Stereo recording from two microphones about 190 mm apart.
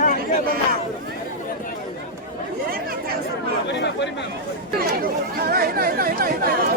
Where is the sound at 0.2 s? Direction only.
50° right (ahead or behind).